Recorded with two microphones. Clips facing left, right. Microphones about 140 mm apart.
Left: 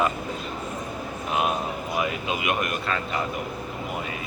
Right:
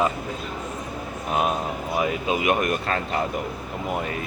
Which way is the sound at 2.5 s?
40° right (ahead or behind).